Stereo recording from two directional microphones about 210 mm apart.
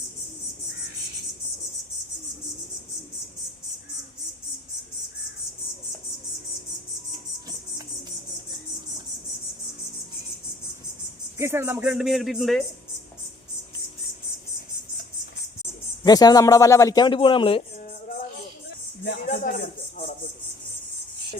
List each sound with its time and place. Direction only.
11.3 s speech: 10° right (ahead or behind)
16.0 s a man's voice: 20° left (ahead or behind)
17.7 s music: 40° left (ahead or behind)
19.0 s a sound: 45° left (ahead or behind)